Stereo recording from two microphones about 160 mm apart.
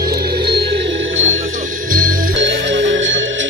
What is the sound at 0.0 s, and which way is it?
Music, 70° right (ahead or behind).